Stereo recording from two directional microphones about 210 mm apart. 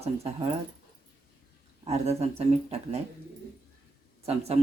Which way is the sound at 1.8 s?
30° right (ahead or behind).